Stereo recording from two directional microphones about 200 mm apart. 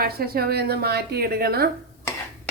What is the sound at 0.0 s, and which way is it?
Dishes, 50° right (ahead or behind).